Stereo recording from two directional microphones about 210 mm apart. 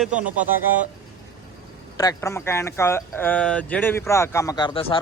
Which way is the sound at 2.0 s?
15° left (ahead or behind).